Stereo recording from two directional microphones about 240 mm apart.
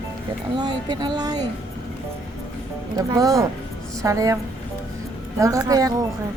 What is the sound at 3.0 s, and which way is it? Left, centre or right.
Speech, centre.